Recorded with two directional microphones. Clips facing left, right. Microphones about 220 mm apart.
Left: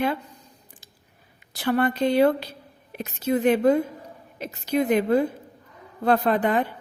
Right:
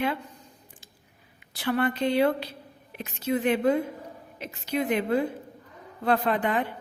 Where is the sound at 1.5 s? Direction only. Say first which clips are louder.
Left 3 dB; 40° left (ahead or behind).